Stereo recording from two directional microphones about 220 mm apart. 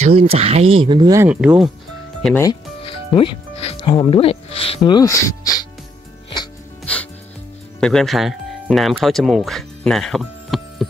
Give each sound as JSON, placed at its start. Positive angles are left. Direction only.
{"t": 0.0, "sound": "speech", "side_deg": -25}
{"t": 2.2, "sound": "speech", "side_deg": 10}
{"t": 2.8, "sound": "speech", "side_deg": 25}
{"t": 6.8, "sound": "music", "side_deg": 5}
{"t": 7.8, "sound": "speech", "side_deg": 0}